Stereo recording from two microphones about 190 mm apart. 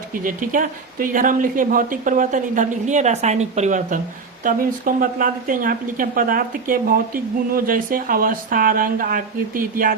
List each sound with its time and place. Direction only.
0.1 s a woman's voice: 45° right (ahead or behind)